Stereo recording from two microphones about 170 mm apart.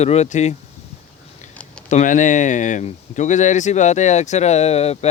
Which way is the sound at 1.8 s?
45° left (ahead or behind).